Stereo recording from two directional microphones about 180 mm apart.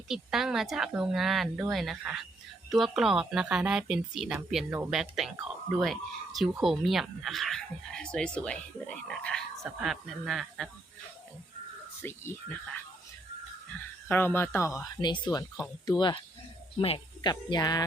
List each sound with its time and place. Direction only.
0.1 s speech: centre (ahead or behind)
12.0 s speech: 15° left (ahead or behind)
14.1 s speech: 10° left (ahead or behind)